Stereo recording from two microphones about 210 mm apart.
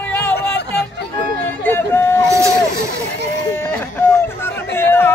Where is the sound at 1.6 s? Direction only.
10° left (ahead or behind).